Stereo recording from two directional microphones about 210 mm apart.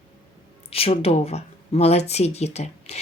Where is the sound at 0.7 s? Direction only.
25° left (ahead or behind).